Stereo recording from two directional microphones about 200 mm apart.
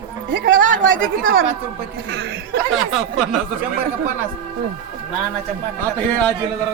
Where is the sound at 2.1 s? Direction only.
75° right (ahead or behind).